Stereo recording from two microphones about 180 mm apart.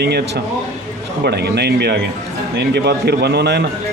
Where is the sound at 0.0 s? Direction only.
65° right (ahead or behind).